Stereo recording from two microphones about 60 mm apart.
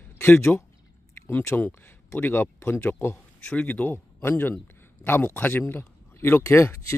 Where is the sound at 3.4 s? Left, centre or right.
Left.